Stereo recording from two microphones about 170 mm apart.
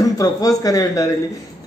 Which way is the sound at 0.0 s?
20° left (ahead or behind).